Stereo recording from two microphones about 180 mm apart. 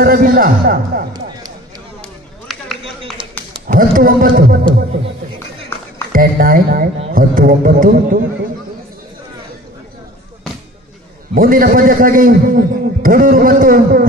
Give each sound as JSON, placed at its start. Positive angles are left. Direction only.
{"t": 0.0, "sound": "a man's voice", "side_deg": -55}
{"t": 2.0, "sound": "chop", "side_deg": 0}
{"t": 2.8, "sound": "a sound", "side_deg": -30}
{"t": 3.6, "sound": "a man's voice", "side_deg": -50}
{"t": 6.1, "sound": "a man's voice", "side_deg": -50}
{"t": 11.3, "sound": "a man's voice", "side_deg": -55}